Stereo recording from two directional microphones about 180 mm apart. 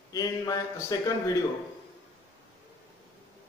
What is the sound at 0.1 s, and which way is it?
A man's voice, 20° left (ahead or behind).